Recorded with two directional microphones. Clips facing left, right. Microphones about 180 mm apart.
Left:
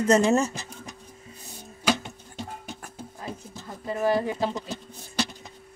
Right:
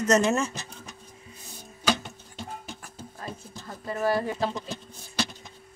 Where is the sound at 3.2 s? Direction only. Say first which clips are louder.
Left 1 dB; 15° left (ahead or behind).